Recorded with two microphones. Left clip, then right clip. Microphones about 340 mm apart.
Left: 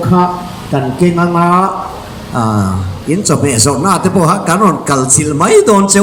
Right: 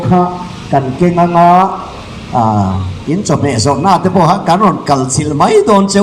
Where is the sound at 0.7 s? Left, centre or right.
Right.